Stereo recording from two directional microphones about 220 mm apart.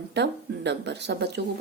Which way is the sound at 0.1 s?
50° right (ahead or behind).